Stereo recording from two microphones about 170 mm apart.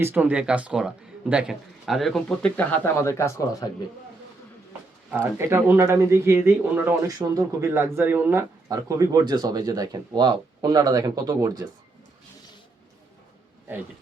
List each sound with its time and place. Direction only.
0.0 s speech: 10° right (ahead or behind); by 3.7 s 15° left (ahead or behind)
5.1 s speech: 15° right (ahead or behind)